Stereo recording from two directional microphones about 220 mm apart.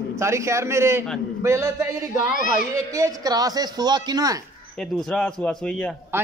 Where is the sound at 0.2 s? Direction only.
15° right (ahead or behind).